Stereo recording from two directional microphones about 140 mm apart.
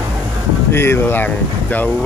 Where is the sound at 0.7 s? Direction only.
15° left (ahead or behind).